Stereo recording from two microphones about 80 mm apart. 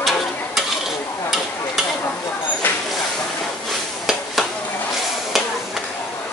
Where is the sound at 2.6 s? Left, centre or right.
Left.